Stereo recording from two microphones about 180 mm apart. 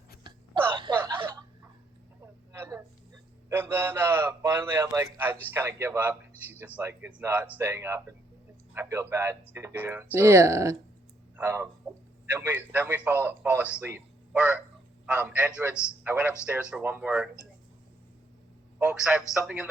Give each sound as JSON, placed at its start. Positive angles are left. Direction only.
{"t": 1.1, "sound": "a sound", "side_deg": -15}
{"t": 3.5, "sound": "a man's voice", "side_deg": -10}
{"t": 18.8, "sound": "speech", "side_deg": -10}